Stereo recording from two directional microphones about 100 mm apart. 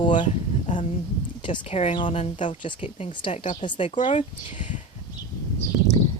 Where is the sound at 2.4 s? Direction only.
55° left (ahead or behind).